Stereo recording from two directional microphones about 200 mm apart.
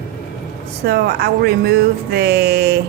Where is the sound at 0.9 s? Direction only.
50° right (ahead or behind).